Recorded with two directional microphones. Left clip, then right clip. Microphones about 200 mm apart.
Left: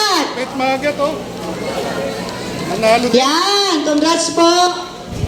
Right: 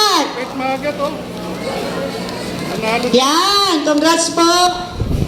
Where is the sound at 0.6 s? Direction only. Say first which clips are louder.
Left 3 dB; 50° left (ahead or behind).